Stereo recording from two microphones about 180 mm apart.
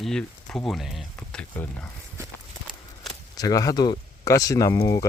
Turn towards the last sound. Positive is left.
turn(degrees=20)  # may be behind; listen again after turning